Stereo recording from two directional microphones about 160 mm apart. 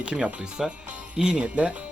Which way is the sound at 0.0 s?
5° right (ahead or behind).